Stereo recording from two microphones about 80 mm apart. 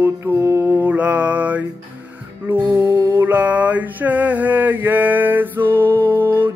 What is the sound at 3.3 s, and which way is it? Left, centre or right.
Mantra, right.